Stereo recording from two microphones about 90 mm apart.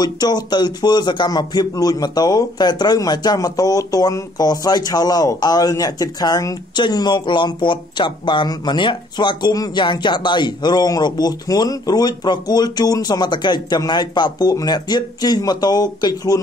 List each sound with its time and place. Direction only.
0.0 s speech: 50° left (ahead or behind)